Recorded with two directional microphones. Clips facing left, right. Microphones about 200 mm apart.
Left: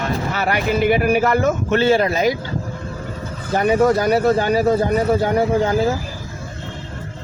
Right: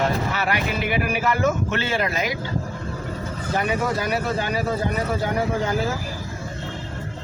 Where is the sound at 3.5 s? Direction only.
40° left (ahead or behind).